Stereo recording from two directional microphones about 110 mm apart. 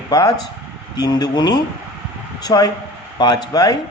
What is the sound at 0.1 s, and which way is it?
A man's voice, 35° left (ahead or behind).